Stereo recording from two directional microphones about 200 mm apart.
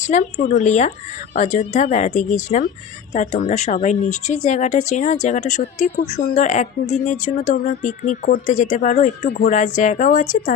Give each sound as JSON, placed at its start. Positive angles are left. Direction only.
{"t": 0.0, "sound": "speech", "side_deg": 35}